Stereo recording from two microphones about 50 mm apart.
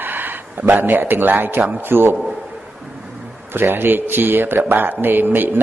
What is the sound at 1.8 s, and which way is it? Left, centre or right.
Mantra, right.